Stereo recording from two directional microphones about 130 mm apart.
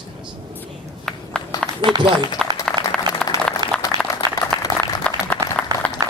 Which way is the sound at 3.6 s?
35° right (ahead or behind).